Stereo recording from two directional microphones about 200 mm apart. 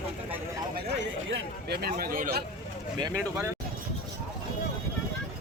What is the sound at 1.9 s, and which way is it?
Speech, 45° right (ahead or behind).